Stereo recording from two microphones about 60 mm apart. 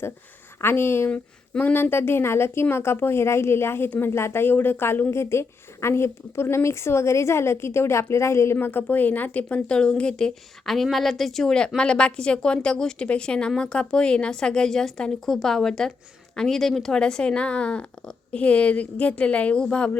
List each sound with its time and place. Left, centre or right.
0.6 s speech: left
1.1 s a sound: left
1.7 s a woman's voice: left
3.8 s speech: left
4.1 s a woman's voice: left
8.6 s speech: left
9.6 s speech: centre